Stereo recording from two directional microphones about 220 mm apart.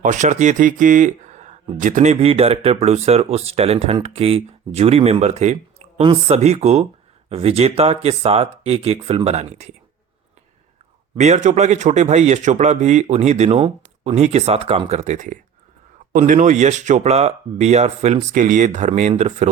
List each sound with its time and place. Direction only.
0.0 s speech: 35° right (ahead or behind)
11.2 s a man's voice: 30° right (ahead or behind)